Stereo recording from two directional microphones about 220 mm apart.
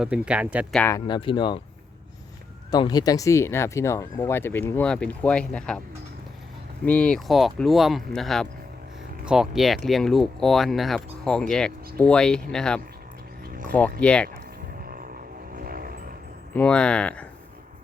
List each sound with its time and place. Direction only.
0.0 s speech: 5° right (ahead or behind)
0.8 s speech: 15° left (ahead or behind)
2.6 s speech: 20° left (ahead or behind)
6.8 s speech: 5° left (ahead or behind)
14.0 s speech: 5° left (ahead or behind)
14.8 s vehicle: 40° right (ahead or behind)
16.6 s speech: 5° left (ahead or behind)